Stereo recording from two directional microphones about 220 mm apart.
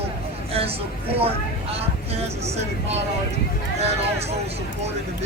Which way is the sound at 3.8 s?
30° right (ahead or behind).